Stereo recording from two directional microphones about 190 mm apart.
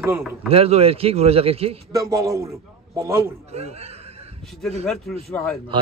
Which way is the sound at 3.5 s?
35° right (ahead or behind).